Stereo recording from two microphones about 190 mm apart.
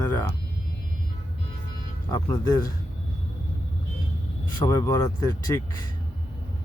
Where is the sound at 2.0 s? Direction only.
15° left (ahead or behind).